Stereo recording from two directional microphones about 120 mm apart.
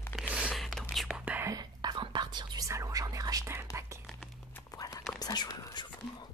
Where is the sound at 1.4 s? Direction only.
35° right (ahead or behind).